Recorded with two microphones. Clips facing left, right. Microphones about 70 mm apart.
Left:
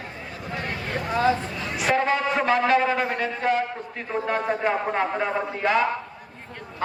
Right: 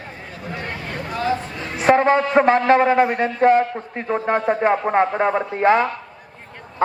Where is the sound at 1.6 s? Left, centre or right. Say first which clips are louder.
Right 12 dB; right.